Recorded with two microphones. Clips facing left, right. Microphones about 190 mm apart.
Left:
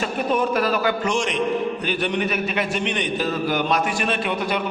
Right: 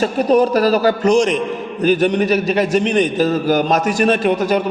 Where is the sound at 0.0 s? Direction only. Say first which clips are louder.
Right 8 dB; 40° right (ahead or behind).